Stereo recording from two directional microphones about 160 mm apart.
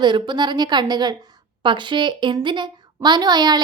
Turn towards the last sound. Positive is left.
turn(degrees=-25)  # may be behind; listen again after turning